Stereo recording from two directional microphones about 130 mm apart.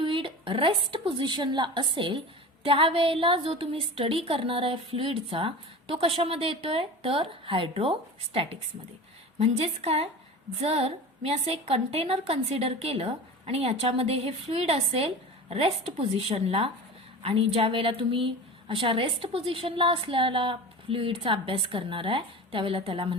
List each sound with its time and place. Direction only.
0.0 s a woman's voice: 40° right (ahead or behind)